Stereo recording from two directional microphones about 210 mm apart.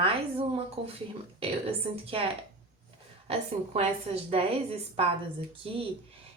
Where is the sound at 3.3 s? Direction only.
30° right (ahead or behind).